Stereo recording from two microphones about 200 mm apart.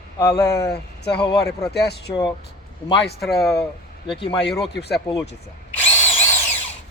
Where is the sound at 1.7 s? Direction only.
55° left (ahead or behind).